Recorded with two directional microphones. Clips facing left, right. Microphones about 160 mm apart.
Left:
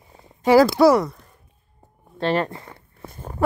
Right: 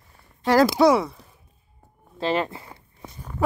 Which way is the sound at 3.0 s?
50° left (ahead or behind).